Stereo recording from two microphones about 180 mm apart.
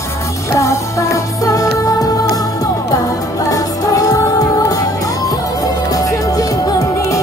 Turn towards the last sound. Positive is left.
turn(degrees=15)  # may be behind; listen again after turning